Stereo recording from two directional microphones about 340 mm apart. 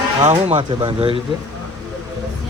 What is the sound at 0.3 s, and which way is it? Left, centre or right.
Speech, centre.